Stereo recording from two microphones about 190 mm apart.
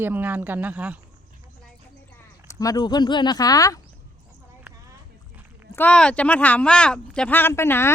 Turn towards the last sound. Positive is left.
turn(degrees=15)  # may be behind; listen again after turning